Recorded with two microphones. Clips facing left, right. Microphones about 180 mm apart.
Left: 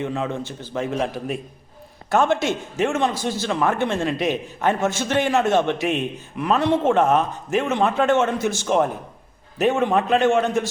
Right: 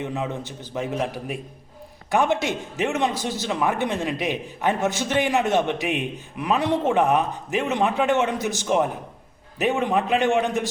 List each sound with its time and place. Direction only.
0.0 s a man's voice: 15° right (ahead or behind)
2.0 s a man's voice: 15° right (ahead or behind)